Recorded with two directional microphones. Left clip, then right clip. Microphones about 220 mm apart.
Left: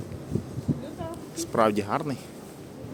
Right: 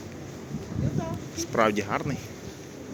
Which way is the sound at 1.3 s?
15° left (ahead or behind).